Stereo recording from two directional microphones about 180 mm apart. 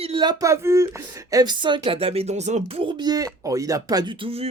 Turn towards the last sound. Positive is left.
turn(degrees=-30)  # may be behind; listen again after turning